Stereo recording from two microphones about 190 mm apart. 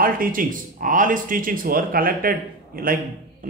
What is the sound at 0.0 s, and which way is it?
A man's voice, 50° right (ahead or behind).